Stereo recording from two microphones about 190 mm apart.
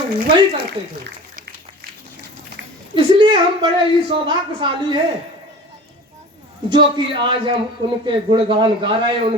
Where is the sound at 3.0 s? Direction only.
25° right (ahead or behind).